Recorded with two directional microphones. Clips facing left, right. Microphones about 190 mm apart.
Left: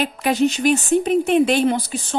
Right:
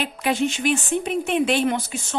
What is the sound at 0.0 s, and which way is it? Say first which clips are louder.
A woman's voice: left 4 dB; 40° left (ahead or behind).